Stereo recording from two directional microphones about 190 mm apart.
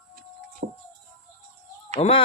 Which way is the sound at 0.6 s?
45° right (ahead or behind).